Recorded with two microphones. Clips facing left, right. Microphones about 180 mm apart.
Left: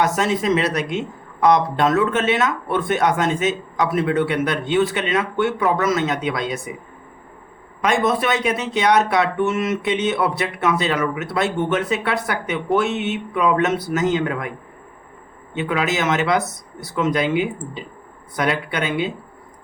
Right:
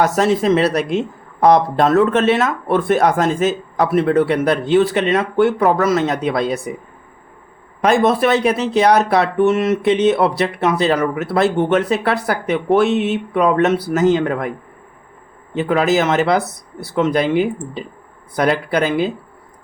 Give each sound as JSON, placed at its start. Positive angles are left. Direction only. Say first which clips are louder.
{"t": 0.0, "sound": "speech", "louder": "right 4 dB", "side_deg": -35}
{"t": 7.9, "sound": "speech", "louder": "right 5 dB", "side_deg": -35}
{"t": 15.5, "sound": "speech", "louder": "right 6 dB", "side_deg": -40}
{"t": 18.3, "sound": "speech", "louder": "right 6 dB", "side_deg": -35}